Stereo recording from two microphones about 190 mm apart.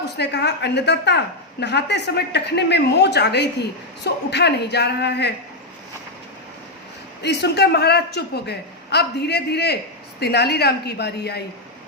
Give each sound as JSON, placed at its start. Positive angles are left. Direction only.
{"t": 0.2, "sound": "a woman's voice", "side_deg": 60}
{"t": 7.2, "sound": "a woman's voice", "side_deg": 60}